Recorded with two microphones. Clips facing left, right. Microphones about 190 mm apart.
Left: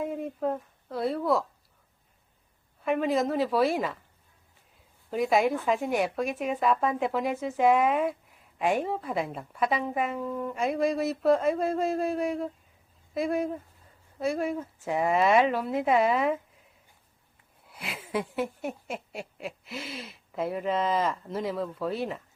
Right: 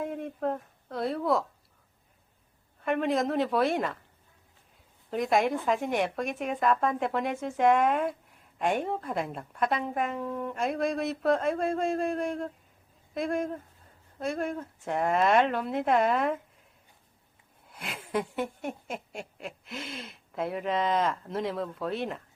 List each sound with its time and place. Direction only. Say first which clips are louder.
0.0 s speech: left 2 dB; centre (ahead or behind)
2.8 s speech: left 1 dB; centre (ahead or behind)
5.1 s speech: left 1 dB; 5° left (ahead or behind)
17.7 s speech: even; 5° left (ahead or behind)